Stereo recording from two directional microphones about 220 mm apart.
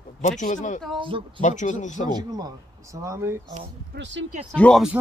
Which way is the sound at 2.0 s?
20° right (ahead or behind).